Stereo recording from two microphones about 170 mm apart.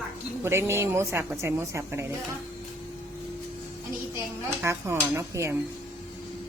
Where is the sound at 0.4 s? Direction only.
15° right (ahead or behind).